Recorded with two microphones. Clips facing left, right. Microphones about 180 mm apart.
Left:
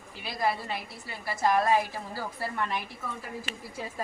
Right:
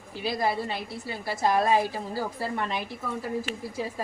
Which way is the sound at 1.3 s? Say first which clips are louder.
Right 1 dB; 30° right (ahead or behind).